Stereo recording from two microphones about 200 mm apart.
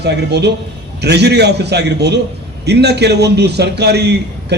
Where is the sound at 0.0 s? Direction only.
55° right (ahead or behind).